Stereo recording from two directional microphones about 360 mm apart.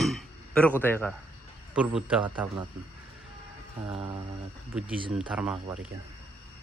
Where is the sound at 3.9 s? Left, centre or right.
Centre.